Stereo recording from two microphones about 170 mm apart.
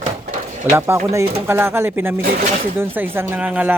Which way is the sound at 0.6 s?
15° right (ahead or behind).